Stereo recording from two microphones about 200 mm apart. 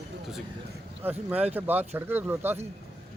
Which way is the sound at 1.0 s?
10° right (ahead or behind).